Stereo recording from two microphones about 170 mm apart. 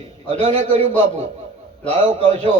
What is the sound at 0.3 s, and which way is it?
Speech, 30° right (ahead or behind).